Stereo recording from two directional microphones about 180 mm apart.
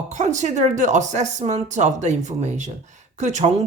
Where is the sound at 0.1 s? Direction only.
40° right (ahead or behind).